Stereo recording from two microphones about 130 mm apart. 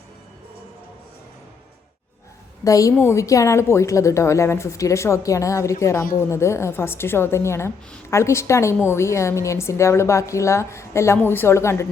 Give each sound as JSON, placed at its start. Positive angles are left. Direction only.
{"t": 2.6, "sound": "a woman's voice", "side_deg": 25}